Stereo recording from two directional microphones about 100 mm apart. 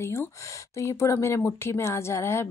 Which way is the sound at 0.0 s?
30° left (ahead or behind).